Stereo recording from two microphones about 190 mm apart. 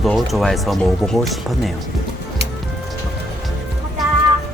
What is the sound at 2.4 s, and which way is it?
Music, 60° right (ahead or behind).